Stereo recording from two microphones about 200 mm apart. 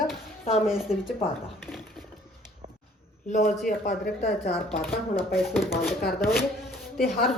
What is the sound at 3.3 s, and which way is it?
Speech, 40° left (ahead or behind).